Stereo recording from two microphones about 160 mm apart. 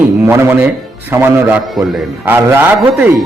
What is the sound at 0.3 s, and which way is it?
A man's voice, 15° right (ahead or behind).